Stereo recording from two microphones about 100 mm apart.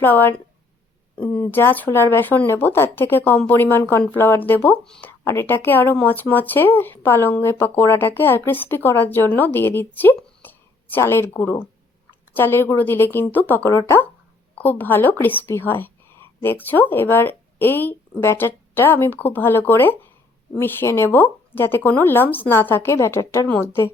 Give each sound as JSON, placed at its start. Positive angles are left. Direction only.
{"t": 0.0, "sound": "speech", "side_deg": 20}
{"t": 4.8, "sound": "speech", "side_deg": 5}
{"t": 5.0, "sound": "speech", "side_deg": 20}